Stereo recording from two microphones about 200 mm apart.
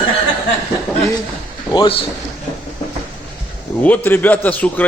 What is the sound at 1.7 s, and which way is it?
Speech, 25° left (ahead or behind).